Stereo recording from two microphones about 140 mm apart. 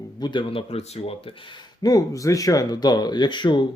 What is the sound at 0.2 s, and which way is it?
Speech, 35° left (ahead or behind).